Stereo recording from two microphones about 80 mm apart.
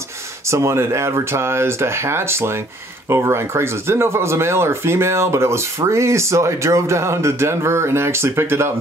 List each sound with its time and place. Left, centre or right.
0.5 s speech: right